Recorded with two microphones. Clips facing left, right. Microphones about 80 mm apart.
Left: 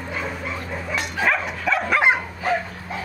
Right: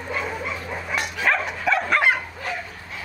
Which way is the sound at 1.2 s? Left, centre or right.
Centre.